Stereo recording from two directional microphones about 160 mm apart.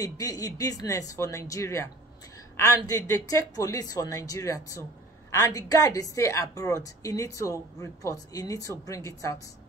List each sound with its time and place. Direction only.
0.0 s speech: 20° left (ahead or behind)